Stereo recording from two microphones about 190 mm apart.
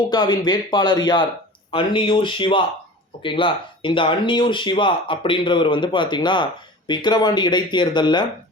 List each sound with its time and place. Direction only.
0.1 s speech: 20° left (ahead or behind)